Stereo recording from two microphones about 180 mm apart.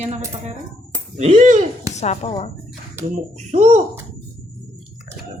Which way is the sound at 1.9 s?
40° left (ahead or behind).